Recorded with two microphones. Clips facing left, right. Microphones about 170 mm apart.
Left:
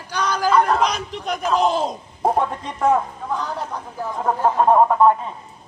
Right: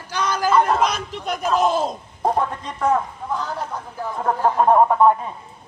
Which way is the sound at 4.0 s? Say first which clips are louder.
Even; 5° left (ahead or behind).